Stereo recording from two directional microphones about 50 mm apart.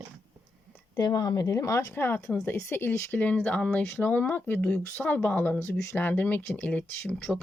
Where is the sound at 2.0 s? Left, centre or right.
Left.